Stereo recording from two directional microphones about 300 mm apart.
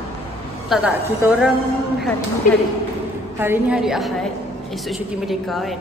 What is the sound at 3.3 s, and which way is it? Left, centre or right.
A woman's voice, centre.